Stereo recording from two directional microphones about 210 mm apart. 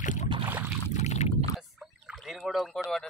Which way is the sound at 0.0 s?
35° left (ahead or behind).